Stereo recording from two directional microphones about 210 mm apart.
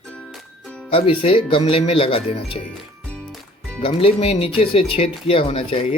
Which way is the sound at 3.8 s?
25° left (ahead or behind).